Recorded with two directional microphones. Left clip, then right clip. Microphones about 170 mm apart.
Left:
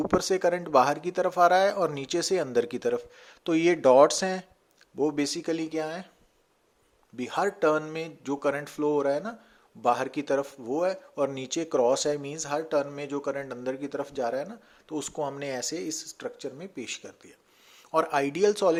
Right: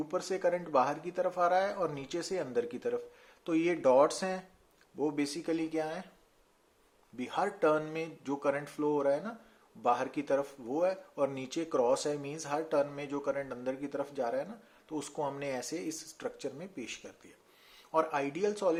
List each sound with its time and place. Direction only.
0.1 s speech: 45° left (ahead or behind)
7.2 s speech: 35° left (ahead or behind)
16.7 s speech: 35° left (ahead or behind)